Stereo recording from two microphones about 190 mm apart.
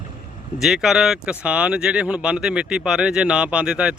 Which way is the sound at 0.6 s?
Centre (ahead or behind).